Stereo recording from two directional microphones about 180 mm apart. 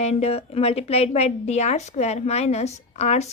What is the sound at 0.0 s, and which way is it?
A woman's voice, 35° left (ahead or behind).